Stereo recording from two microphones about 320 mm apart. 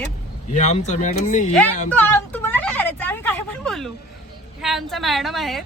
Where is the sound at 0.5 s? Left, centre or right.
Left.